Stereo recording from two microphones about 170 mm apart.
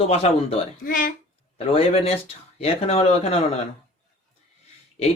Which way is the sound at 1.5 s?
35° left (ahead or behind).